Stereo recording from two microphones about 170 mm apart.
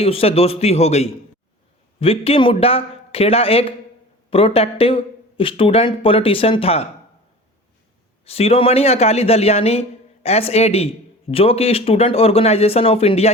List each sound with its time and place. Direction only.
0.0 s speech: 35° left (ahead or behind)
8.2 s speech: 35° left (ahead or behind)